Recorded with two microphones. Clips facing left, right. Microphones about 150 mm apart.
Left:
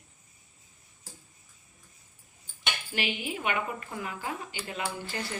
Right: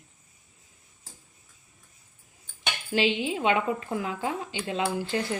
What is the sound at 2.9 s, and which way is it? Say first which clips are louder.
A woman's voice: right 9 dB; 90° right.